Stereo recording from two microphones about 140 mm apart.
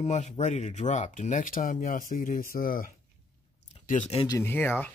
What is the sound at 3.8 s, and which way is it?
Speech, 65° left (ahead or behind).